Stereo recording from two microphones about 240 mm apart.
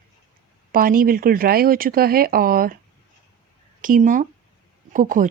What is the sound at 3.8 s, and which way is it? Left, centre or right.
Speech, right.